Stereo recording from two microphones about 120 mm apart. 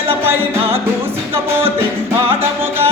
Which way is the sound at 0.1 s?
20° right (ahead or behind).